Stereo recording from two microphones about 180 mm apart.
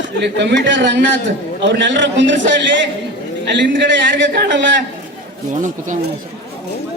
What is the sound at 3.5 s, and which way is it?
A man's voice, 80° right.